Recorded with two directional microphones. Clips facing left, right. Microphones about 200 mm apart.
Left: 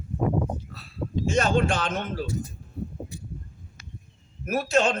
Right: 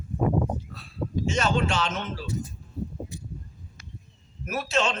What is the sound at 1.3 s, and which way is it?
Speech, 50° left (ahead or behind).